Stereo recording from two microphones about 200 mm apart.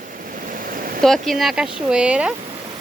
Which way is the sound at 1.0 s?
Centre (ahead or behind).